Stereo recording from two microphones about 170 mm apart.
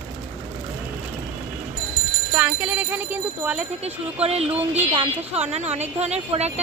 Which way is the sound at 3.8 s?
35° right (ahead or behind).